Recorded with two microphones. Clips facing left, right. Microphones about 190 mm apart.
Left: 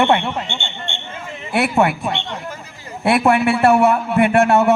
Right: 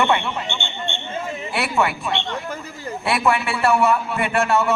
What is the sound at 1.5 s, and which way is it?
Speech, 55° left (ahead or behind).